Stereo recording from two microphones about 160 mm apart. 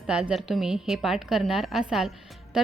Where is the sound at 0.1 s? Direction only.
5° right (ahead or behind).